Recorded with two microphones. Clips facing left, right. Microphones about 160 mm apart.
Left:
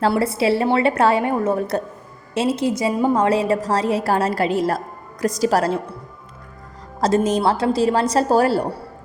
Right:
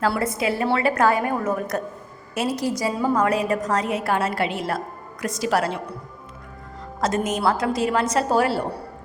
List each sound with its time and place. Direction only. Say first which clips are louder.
0.0 s a woman's voice: left 4 dB; 30° left (ahead or behind)
7.0 s a woman's voice: left 5 dB; 30° left (ahead or behind)